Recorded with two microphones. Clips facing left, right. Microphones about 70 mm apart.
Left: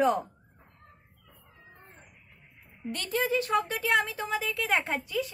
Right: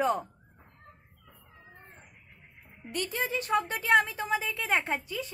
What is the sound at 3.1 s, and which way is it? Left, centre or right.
Speech, right.